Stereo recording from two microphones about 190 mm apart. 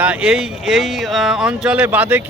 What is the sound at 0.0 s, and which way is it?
Speech, 5° right (ahead or behind).